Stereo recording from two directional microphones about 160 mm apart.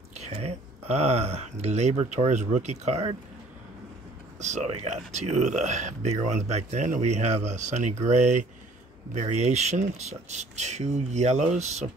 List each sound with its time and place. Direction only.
0.2 s speech: 40° right (ahead or behind)
4.4 s speech: 50° right (ahead or behind)